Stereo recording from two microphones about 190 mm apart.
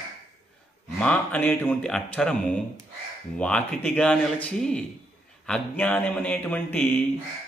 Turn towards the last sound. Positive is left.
turn(degrees=10)  # may be behind; listen again after turning